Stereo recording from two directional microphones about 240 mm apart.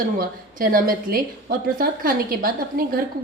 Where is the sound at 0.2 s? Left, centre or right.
Right.